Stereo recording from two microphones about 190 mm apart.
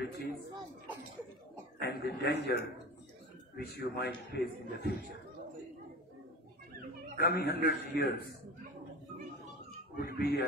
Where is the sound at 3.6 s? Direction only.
55° left (ahead or behind).